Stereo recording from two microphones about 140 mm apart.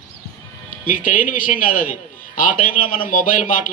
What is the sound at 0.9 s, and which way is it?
A man's voice, 70° left (ahead or behind).